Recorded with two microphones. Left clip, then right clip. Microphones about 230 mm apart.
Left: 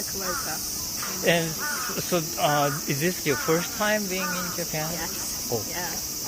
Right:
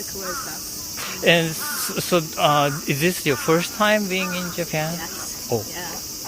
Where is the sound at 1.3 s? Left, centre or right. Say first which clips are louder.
Right 6 dB; right.